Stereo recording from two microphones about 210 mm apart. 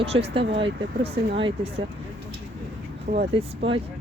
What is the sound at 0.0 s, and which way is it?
Speech, 30° right (ahead or behind).